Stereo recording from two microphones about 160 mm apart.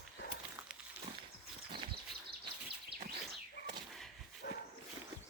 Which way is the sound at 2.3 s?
85° right.